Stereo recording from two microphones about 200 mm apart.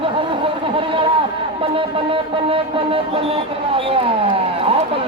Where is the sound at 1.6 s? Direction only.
25° right (ahead or behind).